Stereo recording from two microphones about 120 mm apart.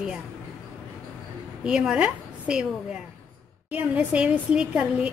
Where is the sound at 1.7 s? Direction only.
5° right (ahead or behind).